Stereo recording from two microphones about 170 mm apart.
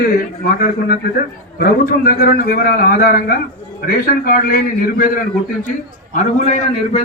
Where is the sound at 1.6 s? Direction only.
60° left (ahead or behind).